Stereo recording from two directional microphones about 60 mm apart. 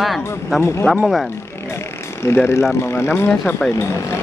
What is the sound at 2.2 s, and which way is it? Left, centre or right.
Speech, left.